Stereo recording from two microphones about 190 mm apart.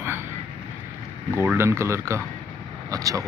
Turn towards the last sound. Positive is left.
turn(degrees=-15)  # may be behind; listen again after turning